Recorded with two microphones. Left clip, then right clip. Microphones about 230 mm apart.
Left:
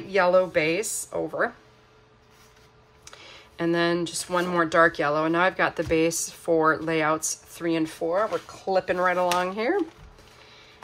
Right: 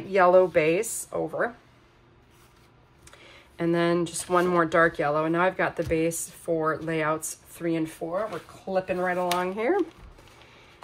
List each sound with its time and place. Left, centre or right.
0.1 s a woman's voice: centre
3.1 s speech: centre
9.3 s speech: centre